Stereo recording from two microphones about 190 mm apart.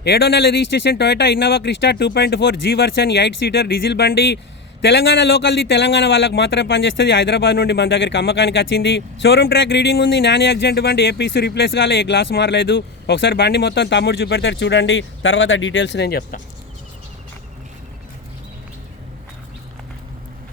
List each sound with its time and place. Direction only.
0.0 s a man's voice: 60° left (ahead or behind)